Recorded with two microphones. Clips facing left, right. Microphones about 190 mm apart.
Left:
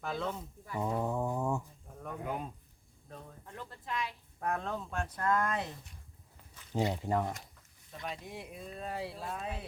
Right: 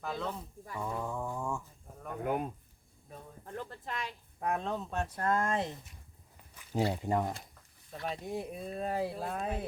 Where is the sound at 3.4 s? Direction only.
45° right (ahead or behind).